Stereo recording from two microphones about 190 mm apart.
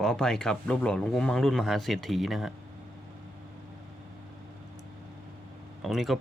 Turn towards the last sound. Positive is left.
turn(degrees=0)  # may be behind; listen again after turning